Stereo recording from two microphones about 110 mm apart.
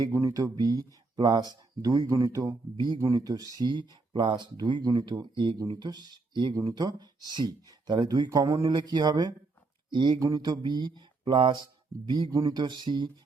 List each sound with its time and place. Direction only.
0.1 s speech: 30° right (ahead or behind); by 6.5 s 45° right (ahead or behind)
6.5 s speech: 30° right (ahead or behind)
8.7 s speech: 40° right (ahead or behind)
9.9 s speech: 45° right (ahead or behind)
10.2 s speech: 35° right (ahead or behind)